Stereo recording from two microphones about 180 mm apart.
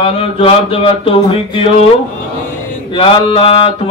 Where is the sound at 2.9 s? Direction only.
30° left (ahead or behind).